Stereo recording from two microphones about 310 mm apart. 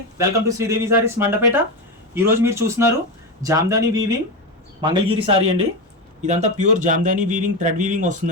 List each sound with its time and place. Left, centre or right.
0.2 s a man's voice: centre